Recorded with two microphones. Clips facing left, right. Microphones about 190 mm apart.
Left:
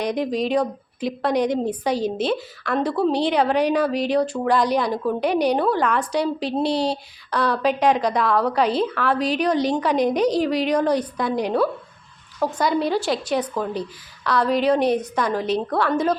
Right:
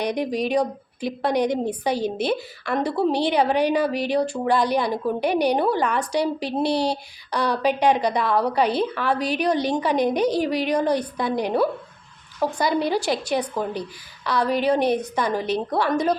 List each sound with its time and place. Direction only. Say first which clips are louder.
0.1 s a woman's voice: left 1 dB; 10° right (ahead or behind)